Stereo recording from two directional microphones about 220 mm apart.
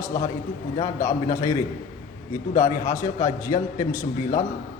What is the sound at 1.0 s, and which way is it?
Speech, 15° left (ahead or behind).